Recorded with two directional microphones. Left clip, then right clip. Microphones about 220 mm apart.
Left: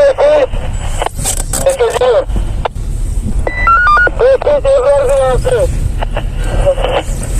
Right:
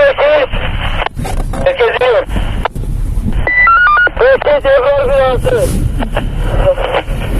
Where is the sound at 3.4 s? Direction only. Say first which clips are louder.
Right 2 dB; centre (ahead or behind).